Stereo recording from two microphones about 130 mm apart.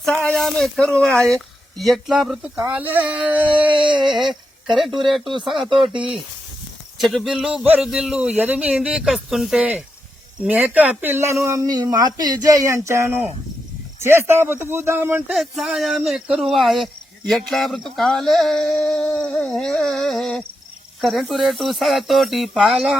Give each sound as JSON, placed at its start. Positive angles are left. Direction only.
{"t": 0.0, "sound": "a man's voice", "side_deg": 5}
{"t": 4.0, "sound": "a sound", "side_deg": 0}
{"t": 4.9, "sound": "speech", "side_deg": -40}
{"t": 7.0, "sound": "a man's voice", "side_deg": 0}
{"t": 15.3, "sound": "speech", "side_deg": 0}